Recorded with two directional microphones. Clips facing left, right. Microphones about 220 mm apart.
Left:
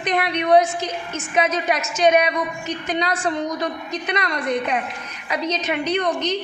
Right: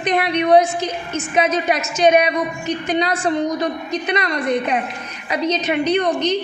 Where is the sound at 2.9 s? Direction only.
25° right (ahead or behind).